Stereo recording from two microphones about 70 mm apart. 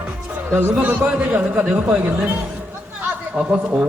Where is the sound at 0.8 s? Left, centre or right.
Right.